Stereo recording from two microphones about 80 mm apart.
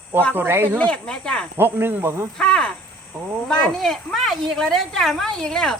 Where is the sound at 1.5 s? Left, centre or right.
Right.